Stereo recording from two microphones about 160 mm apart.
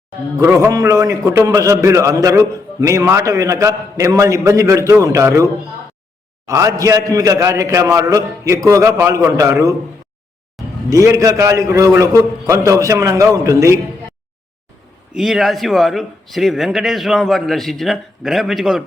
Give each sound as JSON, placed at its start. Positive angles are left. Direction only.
{"t": 0.3, "sound": "a man's voice", "side_deg": -15}
{"t": 10.8, "sound": "a man's voice", "side_deg": -20}
{"t": 15.1, "sound": "a man's voice", "side_deg": 0}